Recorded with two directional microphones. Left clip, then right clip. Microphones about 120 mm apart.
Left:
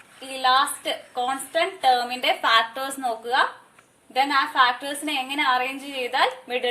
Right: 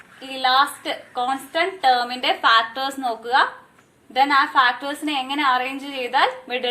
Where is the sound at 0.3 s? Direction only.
40° left (ahead or behind).